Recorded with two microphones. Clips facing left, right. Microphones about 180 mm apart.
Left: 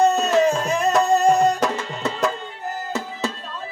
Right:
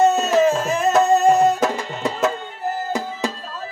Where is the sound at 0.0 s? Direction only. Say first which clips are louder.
Right 1 dB; centre (ahead or behind).